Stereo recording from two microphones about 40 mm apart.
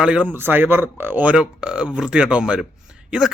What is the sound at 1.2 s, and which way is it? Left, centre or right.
A man's voice, right.